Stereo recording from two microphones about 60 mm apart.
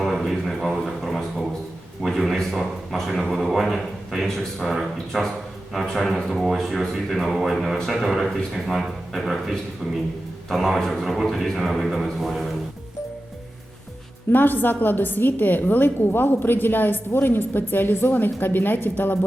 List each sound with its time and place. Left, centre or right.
0.0 s a sound: centre
2.0 s a man's voice: centre
14.3 s a woman's voice: left